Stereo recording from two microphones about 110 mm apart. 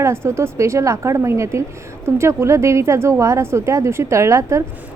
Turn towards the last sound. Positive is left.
turn(degrees=-25)  # may be behind; listen again after turning